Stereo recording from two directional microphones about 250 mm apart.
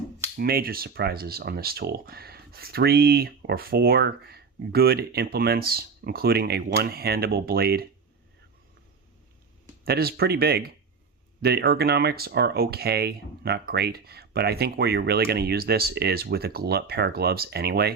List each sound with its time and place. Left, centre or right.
0.3 s speech: right
9.8 s speech: right